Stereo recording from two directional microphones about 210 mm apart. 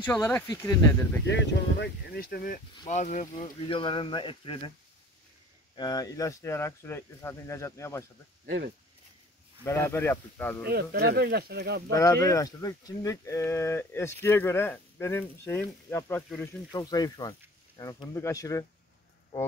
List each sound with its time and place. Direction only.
0.0 s speech: 10° left (ahead or behind)
1.2 s speech: 55° left (ahead or behind)
2.9 s speech: 35° left (ahead or behind)
5.8 s speech: 20° left (ahead or behind)
9.7 s speech: 10° left (ahead or behind)
10.6 s speech: 50° right (ahead or behind)
11.9 s speech: 15° left (ahead or behind)
16.7 s speech: 20° left (ahead or behind)